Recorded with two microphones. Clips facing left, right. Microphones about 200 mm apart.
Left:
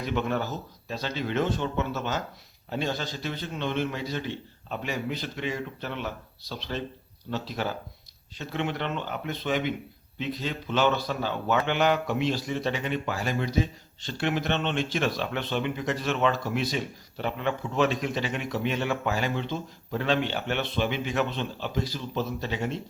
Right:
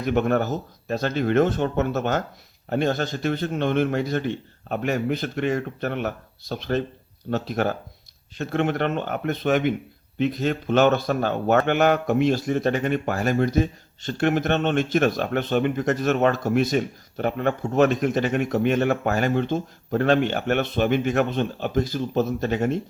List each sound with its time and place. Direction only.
0.0 s speech: 50° right (ahead or behind)